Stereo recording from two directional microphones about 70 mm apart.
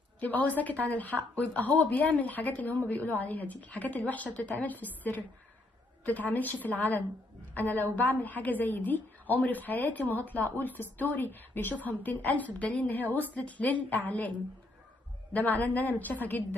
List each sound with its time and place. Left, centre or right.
0.2 s a woman's voice: left
15.3 s a woman's voice: left